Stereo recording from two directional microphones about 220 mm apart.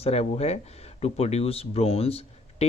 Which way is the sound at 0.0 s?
30° left (ahead or behind).